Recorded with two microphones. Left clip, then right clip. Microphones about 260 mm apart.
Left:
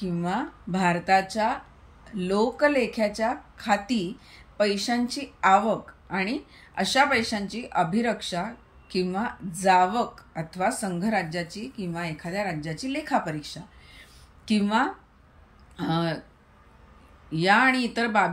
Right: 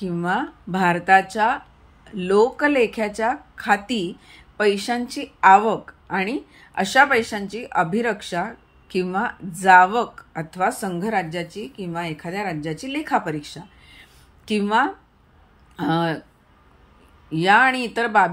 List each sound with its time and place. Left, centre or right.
0.0 s a woman's voice: centre
17.3 s a woman's voice: centre